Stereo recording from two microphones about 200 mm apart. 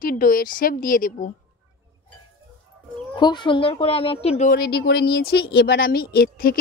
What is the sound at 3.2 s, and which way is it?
A woman's voice, 20° left (ahead or behind).